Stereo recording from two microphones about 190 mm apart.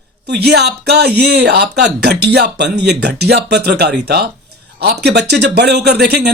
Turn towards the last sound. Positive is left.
turn(degrees=-60)  # may be behind; listen again after turning